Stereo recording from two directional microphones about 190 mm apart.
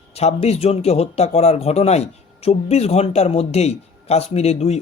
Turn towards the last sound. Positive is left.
turn(degrees=35)  # may be behind; listen again after turning